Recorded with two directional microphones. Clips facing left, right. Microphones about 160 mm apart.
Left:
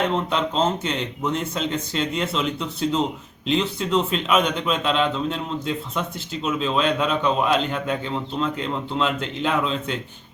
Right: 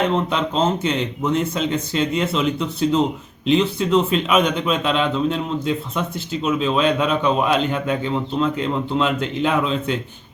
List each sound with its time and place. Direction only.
0.3 s speech: 5° right (ahead or behind)